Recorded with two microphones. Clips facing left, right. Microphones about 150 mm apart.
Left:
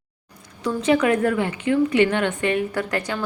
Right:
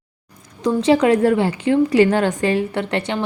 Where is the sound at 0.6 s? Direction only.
30° right (ahead or behind).